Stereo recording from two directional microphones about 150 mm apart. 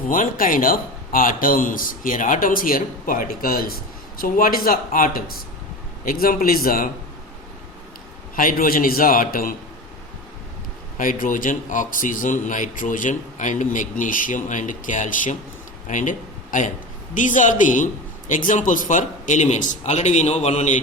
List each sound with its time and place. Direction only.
0.1 s a man's voice: 65° left (ahead or behind)
8.4 s a man's voice: 70° left (ahead or behind)
10.9 s a man's voice: 65° left (ahead or behind)